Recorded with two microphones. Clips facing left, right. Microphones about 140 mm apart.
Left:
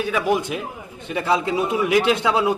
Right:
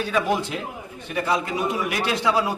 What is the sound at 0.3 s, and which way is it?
A man's voice, 15° left (ahead or behind).